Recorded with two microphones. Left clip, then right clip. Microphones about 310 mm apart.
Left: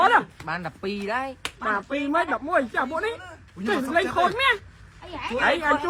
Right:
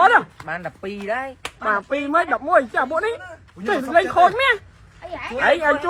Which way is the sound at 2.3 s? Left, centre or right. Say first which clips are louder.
Right 6 dB; right.